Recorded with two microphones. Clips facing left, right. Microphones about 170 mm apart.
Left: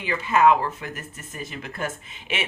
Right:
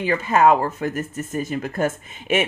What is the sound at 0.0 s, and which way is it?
Speech, 45° right (ahead or behind).